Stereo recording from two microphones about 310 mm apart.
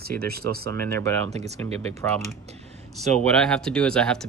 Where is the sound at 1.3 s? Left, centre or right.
Right.